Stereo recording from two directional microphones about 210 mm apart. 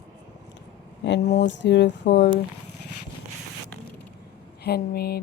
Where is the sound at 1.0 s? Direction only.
55° left (ahead or behind).